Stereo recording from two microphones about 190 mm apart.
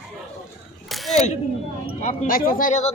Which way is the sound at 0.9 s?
Centre (ahead or behind).